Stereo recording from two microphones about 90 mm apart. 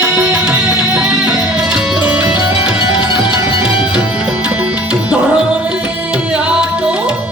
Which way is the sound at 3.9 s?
10° right (ahead or behind).